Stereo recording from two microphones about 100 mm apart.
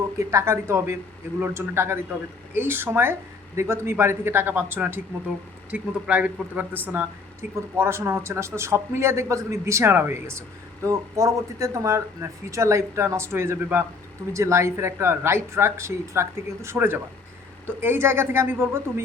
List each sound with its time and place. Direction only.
0.2 s speech: 30° right (ahead or behind)